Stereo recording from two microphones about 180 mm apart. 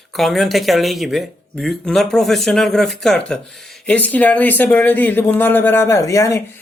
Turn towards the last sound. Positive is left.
turn(degrees=15)  # may be behind; listen again after turning